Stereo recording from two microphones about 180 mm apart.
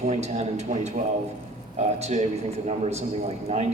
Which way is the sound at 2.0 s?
40° right (ahead or behind).